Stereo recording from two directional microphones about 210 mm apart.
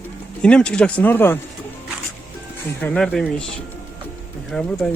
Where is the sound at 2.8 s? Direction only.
5° left (ahead or behind).